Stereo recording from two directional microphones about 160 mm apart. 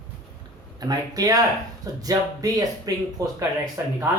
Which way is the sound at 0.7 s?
25° right (ahead or behind).